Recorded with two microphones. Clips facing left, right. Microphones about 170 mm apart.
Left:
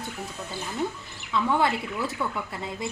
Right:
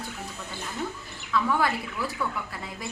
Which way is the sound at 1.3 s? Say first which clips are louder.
Left 1 dB; 25° left (ahead or behind).